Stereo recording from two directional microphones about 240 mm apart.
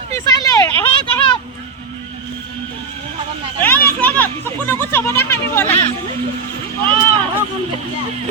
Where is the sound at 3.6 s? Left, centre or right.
Centre.